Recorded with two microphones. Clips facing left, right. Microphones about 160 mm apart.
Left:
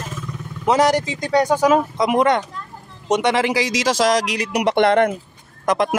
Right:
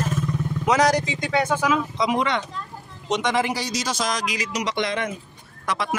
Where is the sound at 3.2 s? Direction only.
75° left (ahead or behind); by 5.1 s 60° left (ahead or behind).